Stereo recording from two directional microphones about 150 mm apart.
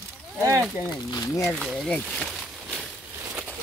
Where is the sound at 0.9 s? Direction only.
25° left (ahead or behind).